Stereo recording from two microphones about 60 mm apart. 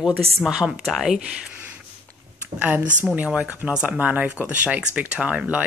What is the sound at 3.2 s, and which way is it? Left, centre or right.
Speech, right.